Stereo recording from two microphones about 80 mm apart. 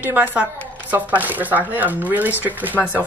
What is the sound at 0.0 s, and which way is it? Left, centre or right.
Speech, right.